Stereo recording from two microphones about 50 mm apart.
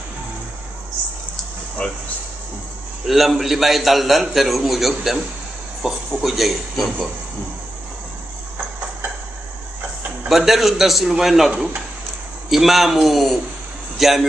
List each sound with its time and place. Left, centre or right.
1.8 s speech: left
3.1 s a man's voice: centre
10.2 s a man's voice: centre